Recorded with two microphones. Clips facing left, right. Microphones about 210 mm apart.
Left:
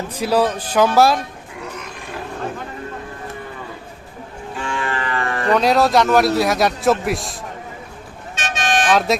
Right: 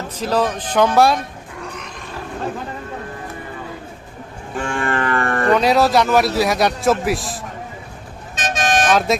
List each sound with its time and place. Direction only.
0.2 s speech: 10° left (ahead or behind)
4.5 s livestock: 50° right (ahead or behind)
5.5 s a man's voice: centre (ahead or behind)
8.4 s vehicle: 40° right (ahead or behind)
8.9 s a man's voice: centre (ahead or behind)